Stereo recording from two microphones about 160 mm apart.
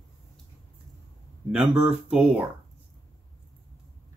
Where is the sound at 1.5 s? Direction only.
5° right (ahead or behind).